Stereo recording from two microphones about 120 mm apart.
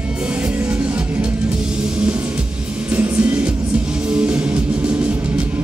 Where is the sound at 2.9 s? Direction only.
10° right (ahead or behind).